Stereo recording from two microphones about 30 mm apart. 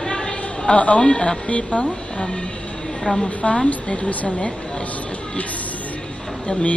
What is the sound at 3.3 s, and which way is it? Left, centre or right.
Speech, left.